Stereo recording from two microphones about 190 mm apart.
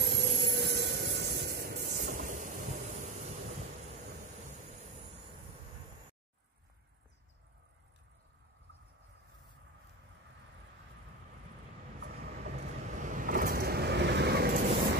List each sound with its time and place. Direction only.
0.4 s vehicle: 55° right (ahead or behind); by 3.5 s 35° right (ahead or behind)
12.5 s vehicle: 40° right (ahead or behind); by 14.8 s 60° right (ahead or behind)